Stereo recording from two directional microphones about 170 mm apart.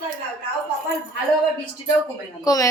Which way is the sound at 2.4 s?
20° left (ahead or behind).